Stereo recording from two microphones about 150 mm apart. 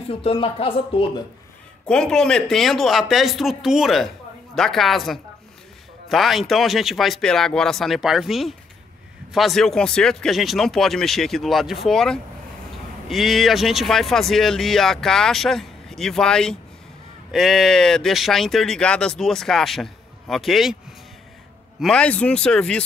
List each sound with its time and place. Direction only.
0.1 s speech: 40° left (ahead or behind)
1.9 s speech: 5° left (ahead or behind)
21.7 s speech: 5° left (ahead or behind)